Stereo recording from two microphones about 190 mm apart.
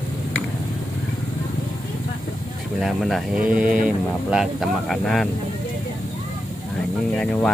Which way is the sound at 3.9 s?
5° right (ahead or behind).